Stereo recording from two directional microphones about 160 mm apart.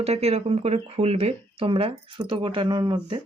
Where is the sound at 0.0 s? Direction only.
40° right (ahead or behind).